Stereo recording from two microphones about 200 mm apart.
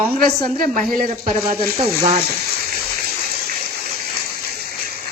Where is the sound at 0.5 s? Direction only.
45° right (ahead or behind).